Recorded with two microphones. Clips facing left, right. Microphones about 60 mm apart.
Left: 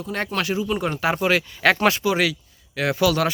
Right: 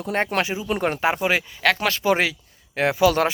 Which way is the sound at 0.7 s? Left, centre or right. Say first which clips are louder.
Right 1 dB; right.